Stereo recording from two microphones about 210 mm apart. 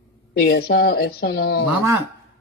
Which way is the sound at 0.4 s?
45° left (ahead or behind).